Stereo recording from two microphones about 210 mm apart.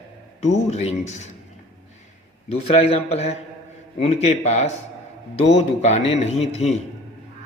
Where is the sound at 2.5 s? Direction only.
30° left (ahead or behind).